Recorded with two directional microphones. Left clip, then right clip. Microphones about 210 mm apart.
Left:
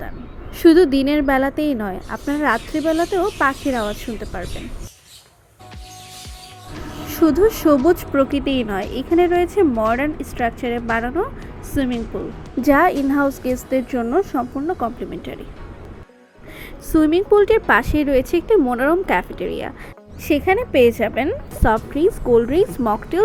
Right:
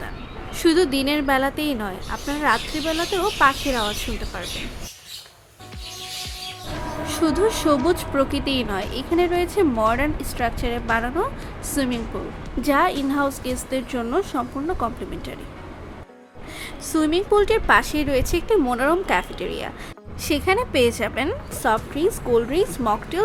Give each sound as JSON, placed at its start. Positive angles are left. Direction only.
{"t": 0.5, "sound": "a woman's voice", "side_deg": 15}
{"t": 7.1, "sound": "a woman's voice", "side_deg": 15}
{"t": 16.9, "sound": "a woman's voice", "side_deg": 15}